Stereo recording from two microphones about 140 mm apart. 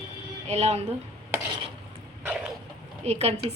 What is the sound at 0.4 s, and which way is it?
Speech, 50° right (ahead or behind).